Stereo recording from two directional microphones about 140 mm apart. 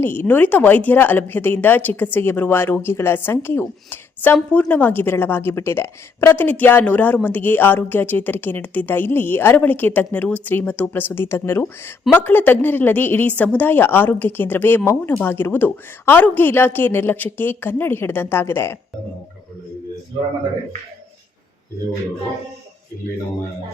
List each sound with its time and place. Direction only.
0.0 s a woman's voice: 15° left (ahead or behind)